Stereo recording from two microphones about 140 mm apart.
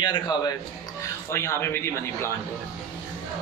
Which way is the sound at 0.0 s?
30° left (ahead or behind).